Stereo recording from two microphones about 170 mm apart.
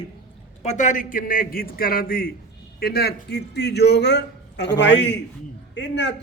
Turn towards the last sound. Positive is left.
turn(degrees=90)